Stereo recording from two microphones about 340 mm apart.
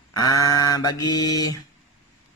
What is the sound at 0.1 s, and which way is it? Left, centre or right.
Mantra, centre.